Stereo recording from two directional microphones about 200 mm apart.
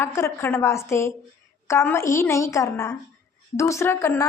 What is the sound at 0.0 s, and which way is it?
A woman's voice, 15° left (ahead or behind).